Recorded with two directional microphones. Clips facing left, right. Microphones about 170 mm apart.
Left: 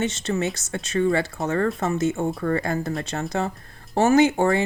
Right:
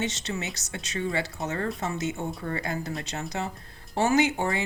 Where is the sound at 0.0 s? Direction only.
55° left (ahead or behind).